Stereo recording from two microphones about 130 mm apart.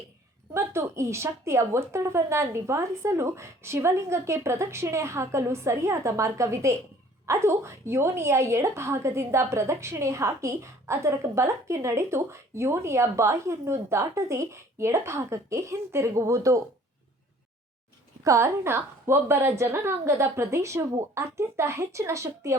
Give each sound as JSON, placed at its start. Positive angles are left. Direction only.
{"t": 0.5, "sound": "a woman's voice", "side_deg": -20}
{"t": 18.2, "sound": "a woman's voice", "side_deg": -25}